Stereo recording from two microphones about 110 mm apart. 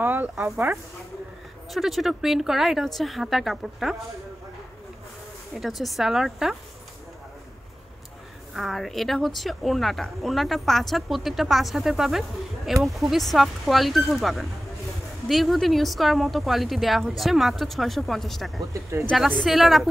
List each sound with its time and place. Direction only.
0.0 s speech: 15° right (ahead or behind)
1.7 s a woman's voice: centre (ahead or behind)
5.5 s a woman's voice: centre (ahead or behind)
8.5 s a woman's voice: centre (ahead or behind)
18.7 s speech: 25° right (ahead or behind)
19.4 s a woman's voice: centre (ahead or behind)